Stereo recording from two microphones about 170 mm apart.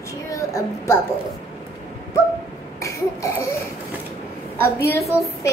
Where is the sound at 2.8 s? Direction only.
20° left (ahead or behind).